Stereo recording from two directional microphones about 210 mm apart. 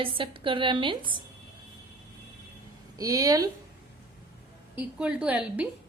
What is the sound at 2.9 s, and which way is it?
Speech, 15° right (ahead or behind).